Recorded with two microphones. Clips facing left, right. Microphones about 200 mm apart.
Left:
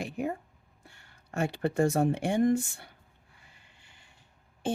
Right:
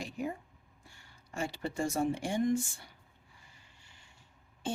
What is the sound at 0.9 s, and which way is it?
Speech, 60° left (ahead or behind).